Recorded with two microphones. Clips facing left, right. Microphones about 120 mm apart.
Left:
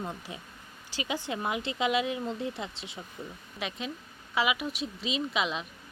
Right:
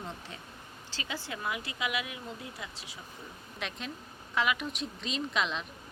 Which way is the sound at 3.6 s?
5° left (ahead or behind).